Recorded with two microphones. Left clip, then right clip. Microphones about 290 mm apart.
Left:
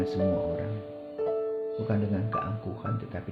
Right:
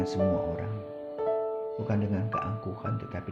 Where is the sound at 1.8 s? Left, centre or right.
Right.